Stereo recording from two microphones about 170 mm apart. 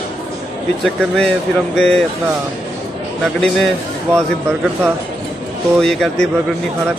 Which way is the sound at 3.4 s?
Centre (ahead or behind).